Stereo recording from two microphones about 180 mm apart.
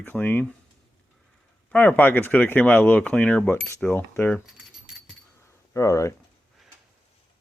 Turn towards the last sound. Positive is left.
turn(degrees=15)  # may be behind; listen again after turning